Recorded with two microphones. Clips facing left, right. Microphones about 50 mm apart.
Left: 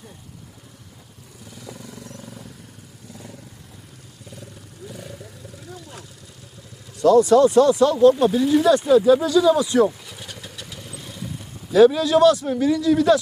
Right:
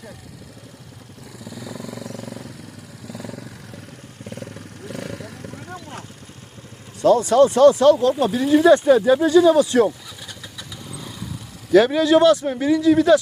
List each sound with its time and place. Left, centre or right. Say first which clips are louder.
2.1 s vehicle: right 6 dB; right
4.3 s vehicle: right 7 dB; right
7.0 s speech: left 1 dB; right
9.3 s speech: right 3 dB; right
11.7 s speech: even; right